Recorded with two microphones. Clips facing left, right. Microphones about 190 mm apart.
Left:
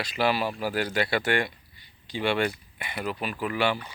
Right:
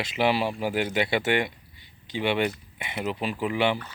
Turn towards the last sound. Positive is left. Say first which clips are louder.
# right 2 dB
turn(degrees=-20)  # may be behind; listen again after turning